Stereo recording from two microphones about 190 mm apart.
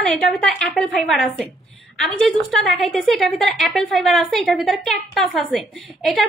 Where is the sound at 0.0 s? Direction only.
Centre (ahead or behind).